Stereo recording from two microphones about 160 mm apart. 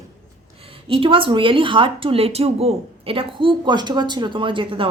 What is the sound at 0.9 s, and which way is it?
Speech, 35° right (ahead or behind).